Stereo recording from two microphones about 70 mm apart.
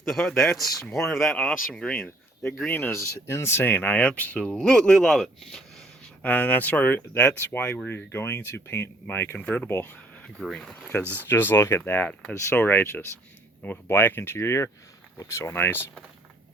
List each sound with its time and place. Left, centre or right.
0.1 s speech: centre
2.6 s speech: left; by 5.6 s centre
6.2 s speech: left
10.2 s speech: centre
11.0 s speech: right
11.3 s speech: left
11.5 s speech: left
11.9 s speech: left